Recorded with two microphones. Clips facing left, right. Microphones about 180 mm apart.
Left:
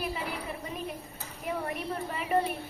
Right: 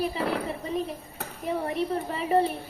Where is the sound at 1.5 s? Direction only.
30° right (ahead or behind).